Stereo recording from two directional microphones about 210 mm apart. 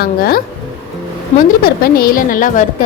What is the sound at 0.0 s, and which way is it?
A woman's voice, 45° left (ahead or behind).